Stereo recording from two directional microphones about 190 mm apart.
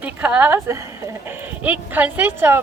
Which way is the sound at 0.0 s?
10° right (ahead or behind).